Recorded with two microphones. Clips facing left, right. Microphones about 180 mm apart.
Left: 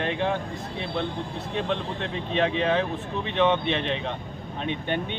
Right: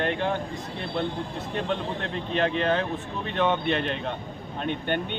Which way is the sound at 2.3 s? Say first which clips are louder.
Left 1 dB; centre (ahead or behind).